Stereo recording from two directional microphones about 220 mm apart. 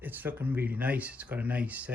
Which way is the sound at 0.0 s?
10° right (ahead or behind).